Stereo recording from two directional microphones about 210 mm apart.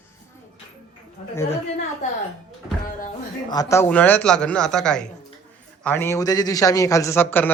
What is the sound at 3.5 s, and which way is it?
A man's voice, 15° left (ahead or behind).